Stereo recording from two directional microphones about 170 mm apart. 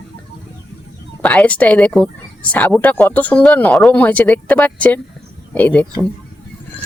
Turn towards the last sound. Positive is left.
turn(degrees=5)  # may be behind; listen again after turning